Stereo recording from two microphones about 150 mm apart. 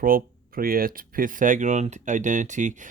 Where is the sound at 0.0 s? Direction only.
75° right (ahead or behind).